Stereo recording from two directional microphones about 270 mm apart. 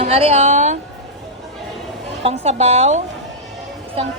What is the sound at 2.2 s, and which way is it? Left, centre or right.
Speech, right.